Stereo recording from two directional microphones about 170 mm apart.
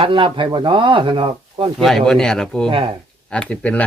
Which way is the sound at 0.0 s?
30° right (ahead or behind).